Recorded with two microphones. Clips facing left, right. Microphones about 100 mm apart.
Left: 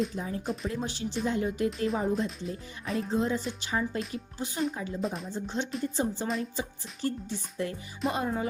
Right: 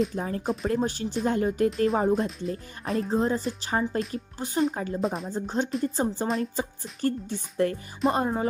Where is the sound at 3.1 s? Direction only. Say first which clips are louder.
Right 3 dB; 40° right (ahead or behind).